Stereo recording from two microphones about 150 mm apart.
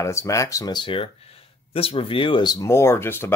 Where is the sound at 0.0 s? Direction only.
20° left (ahead or behind).